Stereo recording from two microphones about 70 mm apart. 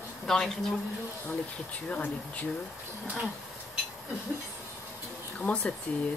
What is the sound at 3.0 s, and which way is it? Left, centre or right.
Speech, right.